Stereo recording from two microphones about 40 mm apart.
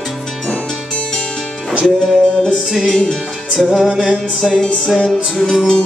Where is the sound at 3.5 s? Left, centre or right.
Centre.